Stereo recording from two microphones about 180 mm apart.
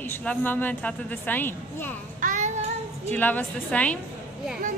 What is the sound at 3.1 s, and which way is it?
Speech, 10° left (ahead or behind).